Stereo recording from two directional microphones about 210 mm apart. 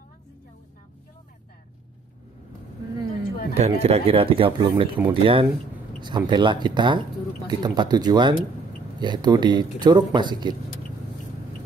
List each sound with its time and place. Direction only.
3.5 s speech: 30° right (ahead or behind)